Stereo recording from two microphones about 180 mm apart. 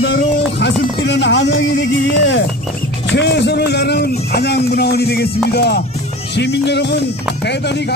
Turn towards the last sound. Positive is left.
turn(degrees=70)  # may be behind; listen again after turning